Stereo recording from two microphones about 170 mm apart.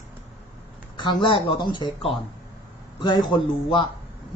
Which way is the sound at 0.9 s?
25° left (ahead or behind).